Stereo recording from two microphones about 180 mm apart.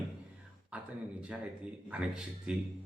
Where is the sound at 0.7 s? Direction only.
5° right (ahead or behind).